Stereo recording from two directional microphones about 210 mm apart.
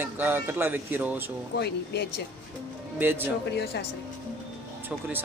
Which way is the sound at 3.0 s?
10° right (ahead or behind).